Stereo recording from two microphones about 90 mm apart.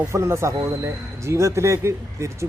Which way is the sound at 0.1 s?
30° right (ahead or behind).